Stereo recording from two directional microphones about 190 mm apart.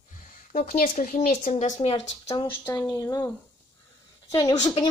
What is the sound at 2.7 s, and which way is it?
A woman's voice, 20° left (ahead or behind).